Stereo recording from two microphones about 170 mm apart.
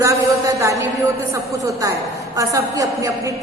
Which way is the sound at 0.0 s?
20° right (ahead or behind).